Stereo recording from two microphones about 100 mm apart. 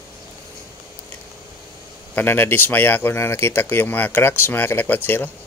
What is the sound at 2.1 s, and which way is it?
Speech, 20° left (ahead or behind).